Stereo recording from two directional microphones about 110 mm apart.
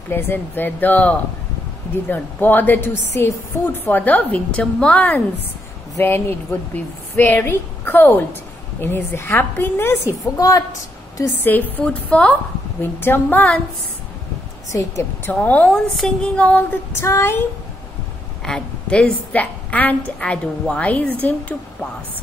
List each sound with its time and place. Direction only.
0.1 s a woman's voice: 20° left (ahead or behind)
10.3 s a woman's voice: 30° left (ahead or behind)
11.3 s a woman's voice: 20° left (ahead or behind)
14.7 s speech: 30° left (ahead or behind)
15.3 s a woman's voice: 10° left (ahead or behind)
18.4 s a woman's voice: 5° left (ahead or behind)